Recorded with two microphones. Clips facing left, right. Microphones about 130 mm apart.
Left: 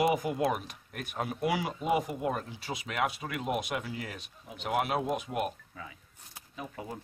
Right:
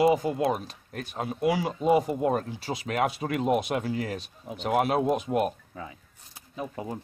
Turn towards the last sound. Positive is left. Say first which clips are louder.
# right 6 dB
turn(degrees=-30)  # may be behind; listen again after turning